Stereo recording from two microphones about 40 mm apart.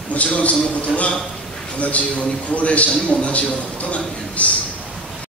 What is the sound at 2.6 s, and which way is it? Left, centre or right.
A man's voice, left.